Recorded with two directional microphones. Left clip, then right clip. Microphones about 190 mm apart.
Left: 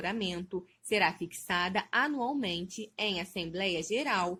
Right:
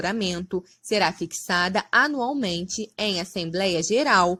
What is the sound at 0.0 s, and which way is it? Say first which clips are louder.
A woman's voice: right 8 dB; 40° right (ahead or behind).